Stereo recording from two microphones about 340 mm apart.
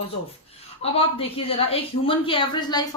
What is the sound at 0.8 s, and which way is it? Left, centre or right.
Speech, centre.